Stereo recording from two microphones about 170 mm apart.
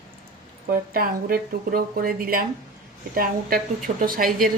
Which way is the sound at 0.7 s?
60° right (ahead or behind).